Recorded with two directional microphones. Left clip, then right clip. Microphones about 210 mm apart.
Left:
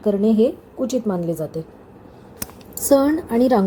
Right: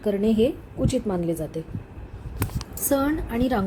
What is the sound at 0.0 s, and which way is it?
A woman's voice, 10° left (ahead or behind).